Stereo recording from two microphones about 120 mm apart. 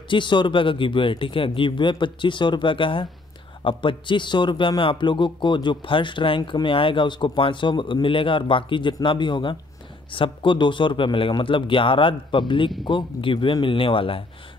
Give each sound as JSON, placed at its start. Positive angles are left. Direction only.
{"t": 0.1, "sound": "a man's voice", "side_deg": 40}